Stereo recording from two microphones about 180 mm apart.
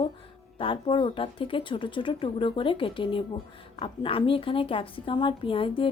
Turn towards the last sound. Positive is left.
turn(degrees=30)  # may be behind; listen again after turning